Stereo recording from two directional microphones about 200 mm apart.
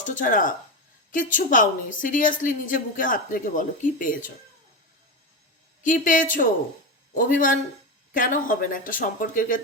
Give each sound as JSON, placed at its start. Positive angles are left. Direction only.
{"t": 0.0, "sound": "a woman's voice", "side_deg": 40}
{"t": 5.8, "sound": "a woman's voice", "side_deg": 40}